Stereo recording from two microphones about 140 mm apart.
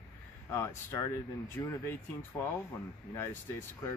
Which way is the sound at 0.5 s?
20° left (ahead or behind).